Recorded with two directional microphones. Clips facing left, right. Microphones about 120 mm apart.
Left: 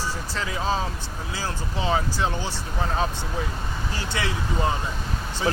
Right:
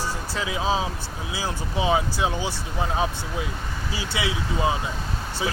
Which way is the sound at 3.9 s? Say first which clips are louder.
Right 2 dB; 10° right (ahead or behind).